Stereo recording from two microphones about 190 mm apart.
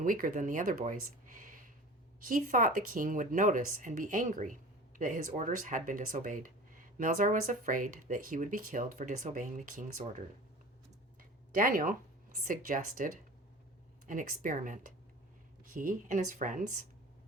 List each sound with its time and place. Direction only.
0.0 s speech: 45° right (ahead or behind)
11.2 s a sound: 45° right (ahead or behind)
12.5 s speech: 45° right (ahead or behind)